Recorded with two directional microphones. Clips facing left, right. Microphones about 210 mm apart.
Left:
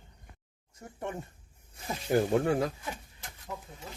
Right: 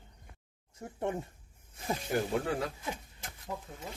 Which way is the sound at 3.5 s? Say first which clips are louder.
Right 1 dB; 20° right (ahead or behind).